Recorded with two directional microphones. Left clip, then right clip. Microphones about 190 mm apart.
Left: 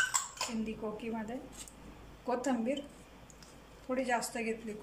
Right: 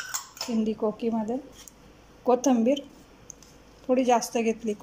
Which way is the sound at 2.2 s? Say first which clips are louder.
Right 12 dB; 35° right (ahead or behind).